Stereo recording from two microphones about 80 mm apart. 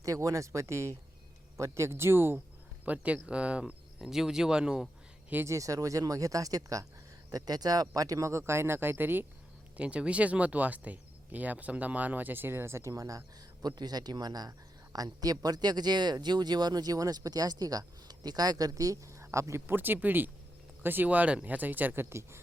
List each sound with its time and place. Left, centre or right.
0.0 s speech: right
2.8 s speech: centre
5.5 s speech: right
9.7 s speech: centre
22.1 s speech: right